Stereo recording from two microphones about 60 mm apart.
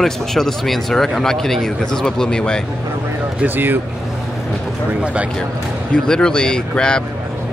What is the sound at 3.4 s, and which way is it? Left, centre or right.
Speech, right.